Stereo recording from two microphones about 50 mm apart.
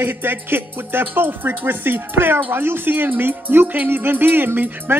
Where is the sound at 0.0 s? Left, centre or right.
Right.